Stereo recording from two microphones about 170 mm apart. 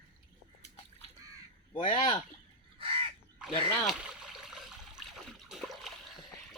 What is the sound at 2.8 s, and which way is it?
Crow, 35° right (ahead or behind).